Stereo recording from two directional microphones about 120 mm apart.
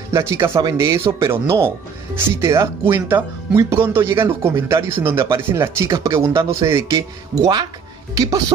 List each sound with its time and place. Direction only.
0.1 s speech: 20° right (ahead or behind)